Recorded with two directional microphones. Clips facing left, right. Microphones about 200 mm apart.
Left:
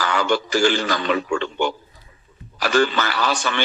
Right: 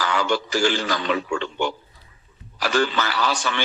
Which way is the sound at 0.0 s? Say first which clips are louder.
Left 2 dB; 55° left (ahead or behind).